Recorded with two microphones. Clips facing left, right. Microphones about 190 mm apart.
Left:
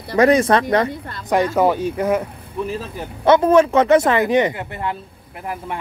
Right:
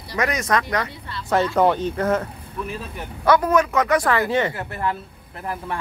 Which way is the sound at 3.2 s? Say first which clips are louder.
Left 5 dB; 25° left (ahead or behind).